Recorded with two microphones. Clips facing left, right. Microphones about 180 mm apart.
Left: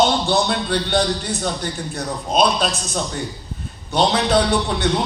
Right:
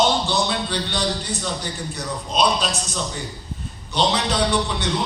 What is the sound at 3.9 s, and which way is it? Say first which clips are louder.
Speech: left 5 dB; 50° left (ahead or behind).